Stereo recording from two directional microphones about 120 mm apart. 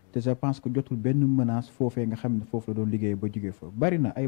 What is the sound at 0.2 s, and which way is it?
A man's voice, 15° left (ahead or behind).